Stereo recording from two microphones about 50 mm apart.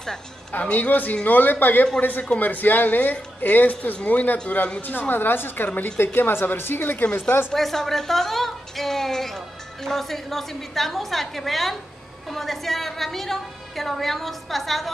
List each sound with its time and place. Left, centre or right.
0.5 s a woman's voice: left
7.5 s a woman's voice: centre